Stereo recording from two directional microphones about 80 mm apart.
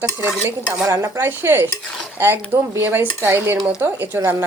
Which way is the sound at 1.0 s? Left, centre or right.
Right.